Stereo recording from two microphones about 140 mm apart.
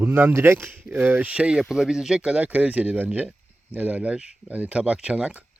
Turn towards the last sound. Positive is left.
turn(degrees=-10)  # may be behind; listen again after turning